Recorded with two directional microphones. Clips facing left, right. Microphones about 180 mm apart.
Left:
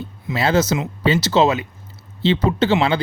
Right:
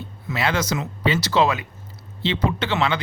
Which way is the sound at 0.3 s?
30° left (ahead or behind).